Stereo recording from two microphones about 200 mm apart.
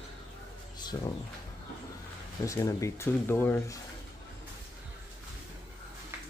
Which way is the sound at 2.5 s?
15° left (ahead or behind).